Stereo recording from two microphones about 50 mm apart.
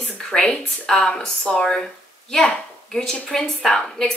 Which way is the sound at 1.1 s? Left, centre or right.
Left.